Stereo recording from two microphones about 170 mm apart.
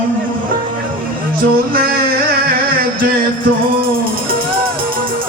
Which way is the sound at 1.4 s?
60° right (ahead or behind).